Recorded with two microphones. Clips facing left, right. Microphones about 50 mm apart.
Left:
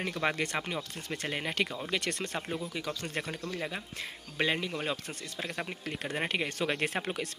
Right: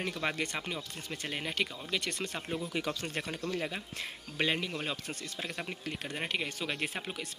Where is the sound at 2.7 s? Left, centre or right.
Centre.